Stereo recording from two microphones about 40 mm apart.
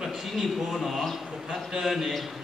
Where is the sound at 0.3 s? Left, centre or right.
Centre.